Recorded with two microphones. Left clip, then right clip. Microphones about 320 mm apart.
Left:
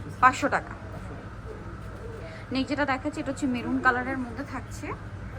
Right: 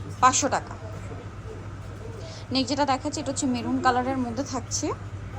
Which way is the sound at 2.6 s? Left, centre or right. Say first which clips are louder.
Right 2 dB; centre.